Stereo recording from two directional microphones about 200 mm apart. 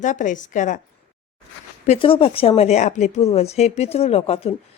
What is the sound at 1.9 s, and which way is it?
A woman's voice, 25° left (ahead or behind).